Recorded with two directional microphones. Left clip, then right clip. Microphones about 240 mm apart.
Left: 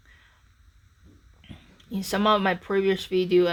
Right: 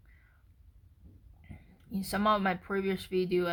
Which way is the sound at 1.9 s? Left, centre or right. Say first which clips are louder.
Left 6 dB; left.